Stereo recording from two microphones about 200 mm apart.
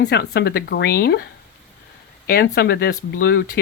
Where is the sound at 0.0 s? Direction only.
55° left (ahead or behind).